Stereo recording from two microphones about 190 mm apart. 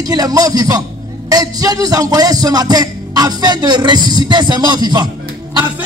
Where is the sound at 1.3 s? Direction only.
20° right (ahead or behind).